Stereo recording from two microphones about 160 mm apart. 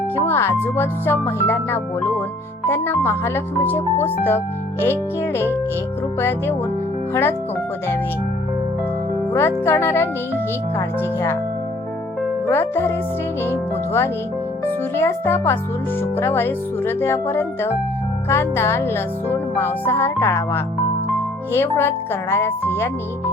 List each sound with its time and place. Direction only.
0.3 s music: 15° left (ahead or behind)
7.1 s music: 15° left (ahead or behind)
9.3 s music: 15° left (ahead or behind)
12.5 s music: 15° left (ahead or behind)